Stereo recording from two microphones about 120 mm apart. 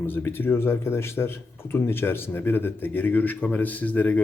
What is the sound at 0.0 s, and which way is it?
Speech, 20° left (ahead or behind).